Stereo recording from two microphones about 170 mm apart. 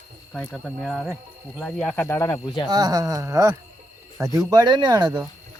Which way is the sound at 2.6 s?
25° right (ahead or behind).